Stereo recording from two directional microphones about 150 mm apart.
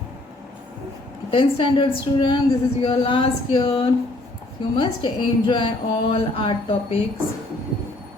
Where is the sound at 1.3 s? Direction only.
30° left (ahead or behind).